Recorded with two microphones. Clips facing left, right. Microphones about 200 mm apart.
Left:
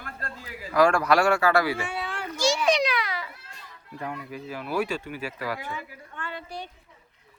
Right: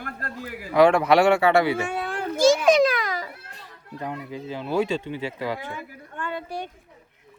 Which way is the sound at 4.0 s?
20° right (ahead or behind).